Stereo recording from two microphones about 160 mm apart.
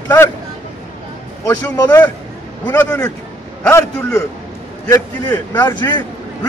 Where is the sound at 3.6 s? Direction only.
15° left (ahead or behind).